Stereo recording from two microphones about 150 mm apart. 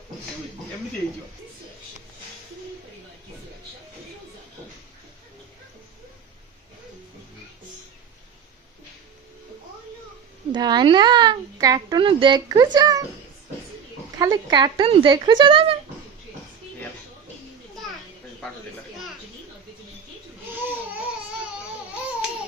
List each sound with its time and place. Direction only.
10.5 s a woman's voice: 30° right (ahead or behind)
14.1 s speech: 25° right (ahead or behind)
20.5 s baby cry: 10° right (ahead or behind)